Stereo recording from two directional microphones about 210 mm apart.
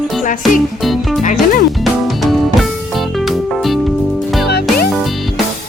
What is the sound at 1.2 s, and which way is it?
Music, 40° left (ahead or behind).